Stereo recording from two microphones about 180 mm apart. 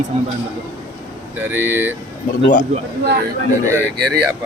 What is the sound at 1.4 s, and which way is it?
Speech, 10° right (ahead or behind).